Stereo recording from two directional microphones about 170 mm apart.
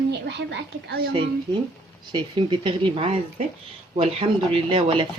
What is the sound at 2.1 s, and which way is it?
Speech, 30° right (ahead or behind).